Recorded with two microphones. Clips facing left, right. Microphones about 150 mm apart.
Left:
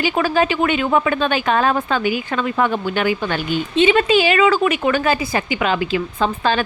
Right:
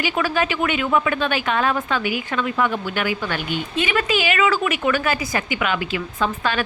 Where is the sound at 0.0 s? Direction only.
30° left (ahead or behind).